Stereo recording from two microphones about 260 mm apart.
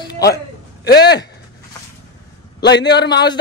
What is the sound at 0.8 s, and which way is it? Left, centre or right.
Speech, left.